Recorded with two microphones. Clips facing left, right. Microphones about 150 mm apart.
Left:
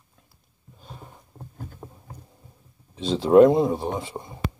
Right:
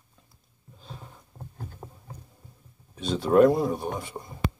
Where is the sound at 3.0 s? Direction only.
25° left (ahead or behind).